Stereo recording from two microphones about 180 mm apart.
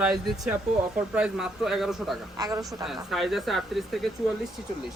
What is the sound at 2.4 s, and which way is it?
Speech, 20° right (ahead or behind).